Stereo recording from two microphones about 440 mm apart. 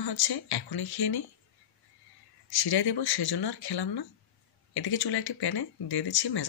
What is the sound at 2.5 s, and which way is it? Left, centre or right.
Speech, left.